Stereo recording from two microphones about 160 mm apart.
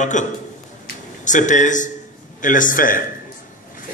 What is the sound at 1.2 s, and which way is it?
A man's voice, 50° left (ahead or behind).